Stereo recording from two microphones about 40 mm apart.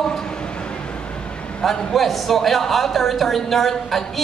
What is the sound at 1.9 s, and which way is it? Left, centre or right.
A woman's voice, centre.